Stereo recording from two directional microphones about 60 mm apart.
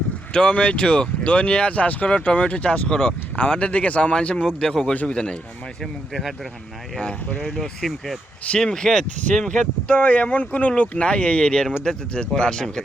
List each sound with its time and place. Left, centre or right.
0.3 s speech: centre
5.8 s speech: centre
7.0 s speech: left
7.6 s speech: centre
8.4 s speech: centre